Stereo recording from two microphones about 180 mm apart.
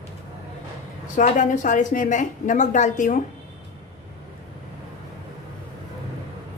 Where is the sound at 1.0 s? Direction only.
45° left (ahead or behind).